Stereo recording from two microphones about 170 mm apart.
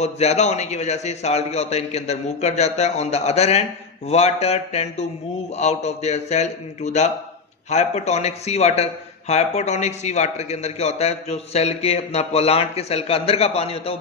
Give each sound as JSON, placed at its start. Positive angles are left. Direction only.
{"t": 0.0, "sound": "a man's voice", "side_deg": 40}